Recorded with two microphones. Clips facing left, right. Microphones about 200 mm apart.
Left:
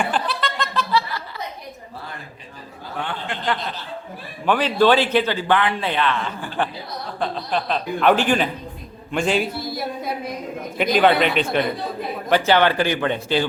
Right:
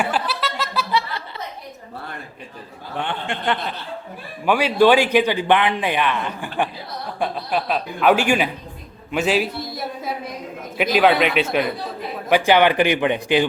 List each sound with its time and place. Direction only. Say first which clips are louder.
0.0 s music: even; 5° right (ahead or behind)
3.1 s speech: right 2 dB; 25° right (ahead or behind)
4.4 s a man's voice: right 2 dB; 10° right (ahead or behind)